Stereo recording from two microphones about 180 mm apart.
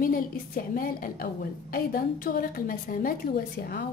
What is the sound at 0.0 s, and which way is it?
A woman's voice, 55° left (ahead or behind).